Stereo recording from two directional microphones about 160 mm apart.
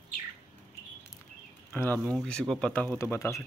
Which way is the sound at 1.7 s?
10° left (ahead or behind).